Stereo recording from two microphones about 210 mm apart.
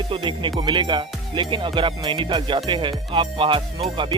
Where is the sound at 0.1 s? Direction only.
25° right (ahead or behind).